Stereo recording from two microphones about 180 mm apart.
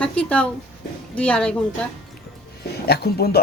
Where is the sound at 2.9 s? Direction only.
60° left (ahead or behind).